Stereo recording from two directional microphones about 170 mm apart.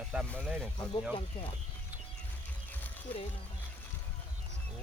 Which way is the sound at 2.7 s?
10° left (ahead or behind).